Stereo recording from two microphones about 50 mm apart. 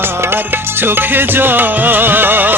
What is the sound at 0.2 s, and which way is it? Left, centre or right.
Music, right.